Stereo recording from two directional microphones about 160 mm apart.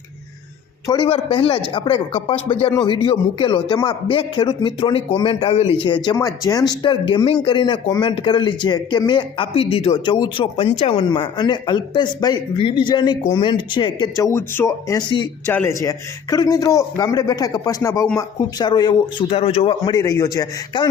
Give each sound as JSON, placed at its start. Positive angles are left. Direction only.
{"t": 0.9, "sound": "a man's voice", "side_deg": 30}
{"t": 6.1, "sound": "speech", "side_deg": 20}
{"t": 15.4, "sound": "speech", "side_deg": 15}